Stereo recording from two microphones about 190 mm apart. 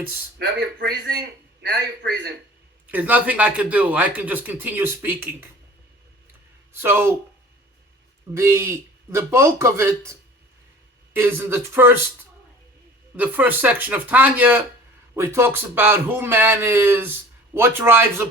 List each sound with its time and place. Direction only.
0.3 s speech: 60° right (ahead or behind)
2.8 s speech: 10° right (ahead or behind)
8.3 s speech: 15° right (ahead or behind)
13.1 s speech: 10° right (ahead or behind)